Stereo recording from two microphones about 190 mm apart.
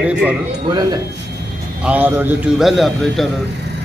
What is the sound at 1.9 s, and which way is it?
A man's voice, 10° right (ahead or behind).